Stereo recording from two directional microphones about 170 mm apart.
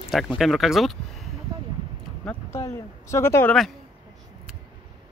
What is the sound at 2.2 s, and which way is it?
Speech, 15° left (ahead or behind).